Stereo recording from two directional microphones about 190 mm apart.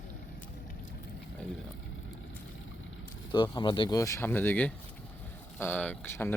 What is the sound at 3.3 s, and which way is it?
Speech, 25° left (ahead or behind).